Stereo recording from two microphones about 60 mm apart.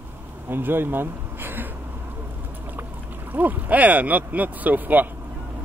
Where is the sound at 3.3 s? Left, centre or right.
Right.